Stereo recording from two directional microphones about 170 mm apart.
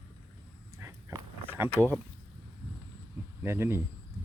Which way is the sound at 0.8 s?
15° right (ahead or behind).